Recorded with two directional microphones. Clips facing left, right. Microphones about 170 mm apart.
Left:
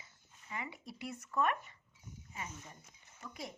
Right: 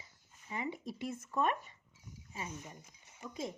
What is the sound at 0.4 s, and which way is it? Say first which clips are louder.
A child's voice: right 5 dB; 20° right (ahead or behind).